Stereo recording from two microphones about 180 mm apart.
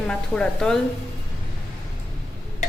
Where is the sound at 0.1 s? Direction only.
5° left (ahead or behind).